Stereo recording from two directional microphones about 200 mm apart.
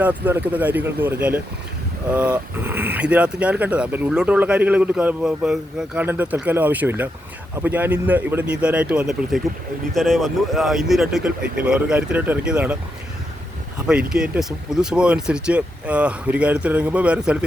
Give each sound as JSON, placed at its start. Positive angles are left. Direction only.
{"t": 0.0, "sound": "speech", "side_deg": -10}
{"t": 13.7, "sound": "speech", "side_deg": -5}